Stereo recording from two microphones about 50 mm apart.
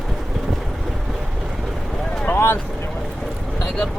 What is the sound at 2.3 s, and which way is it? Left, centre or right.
Speech, left.